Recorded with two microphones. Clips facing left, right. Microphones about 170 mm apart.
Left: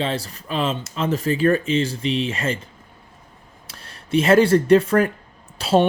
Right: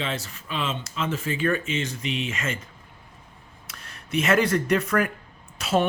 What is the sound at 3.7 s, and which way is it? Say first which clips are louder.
Speech: left 9 dB; 30° left (ahead or behind).